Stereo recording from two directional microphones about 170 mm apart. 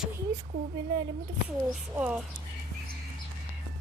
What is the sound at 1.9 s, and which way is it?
Child singing, 5° right (ahead or behind).